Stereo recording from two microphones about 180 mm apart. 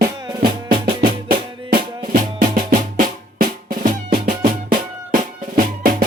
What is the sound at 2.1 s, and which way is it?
Drum, 50° right (ahead or behind).